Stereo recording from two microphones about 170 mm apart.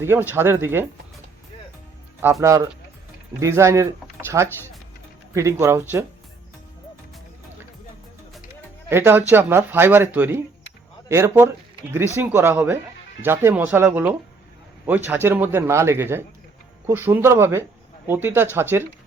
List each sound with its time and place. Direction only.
0.0 s speech: 15° right (ahead or behind)
2.2 s speech: 20° right (ahead or behind)
8.9 s speech: 15° right (ahead or behind)